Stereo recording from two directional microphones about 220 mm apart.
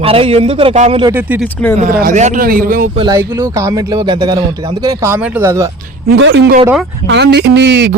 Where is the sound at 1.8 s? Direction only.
40° right (ahead or behind).